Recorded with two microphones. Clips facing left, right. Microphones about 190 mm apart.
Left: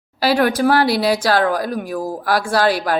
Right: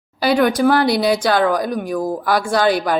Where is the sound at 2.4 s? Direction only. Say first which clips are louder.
Even; centre (ahead or behind).